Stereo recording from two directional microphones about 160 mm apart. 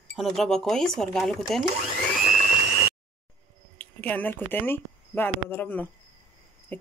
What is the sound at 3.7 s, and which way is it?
Speech, 10° left (ahead or behind).